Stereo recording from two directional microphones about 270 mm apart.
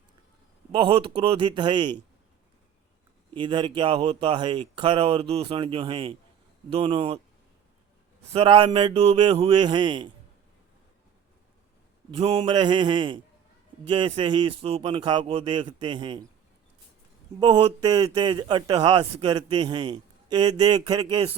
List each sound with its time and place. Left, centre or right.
0.7 s speech: centre
3.3 s a man's voice: centre
8.3 s a man's voice: centre
12.1 s a man's voice: right
17.4 s a man's voice: centre